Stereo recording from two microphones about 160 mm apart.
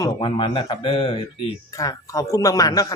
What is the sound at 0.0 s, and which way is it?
Speech, 30° left (ahead or behind).